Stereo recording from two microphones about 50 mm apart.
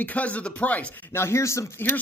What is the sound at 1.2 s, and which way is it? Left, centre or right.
Speech, left.